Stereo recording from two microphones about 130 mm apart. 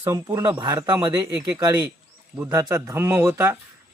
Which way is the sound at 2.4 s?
25° right (ahead or behind).